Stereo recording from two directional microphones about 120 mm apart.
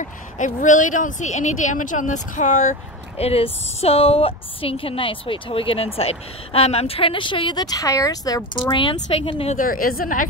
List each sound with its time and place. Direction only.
0.0 s speech: 90° left
3.2 s a woman's voice: 55° left (ahead or behind); by 8.5 s 30° left (ahead or behind)
8.5 s a woman's voice: 45° left (ahead or behind)